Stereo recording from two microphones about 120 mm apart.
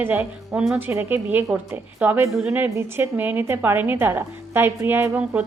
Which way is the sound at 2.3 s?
5° right (ahead or behind).